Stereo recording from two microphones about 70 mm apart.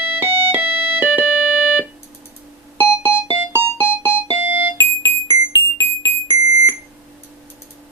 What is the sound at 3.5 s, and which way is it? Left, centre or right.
Music, right.